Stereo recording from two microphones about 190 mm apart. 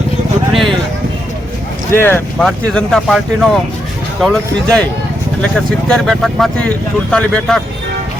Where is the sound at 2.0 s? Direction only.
10° left (ahead or behind).